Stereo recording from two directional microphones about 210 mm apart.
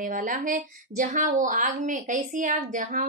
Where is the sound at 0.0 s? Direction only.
40° right (ahead or behind).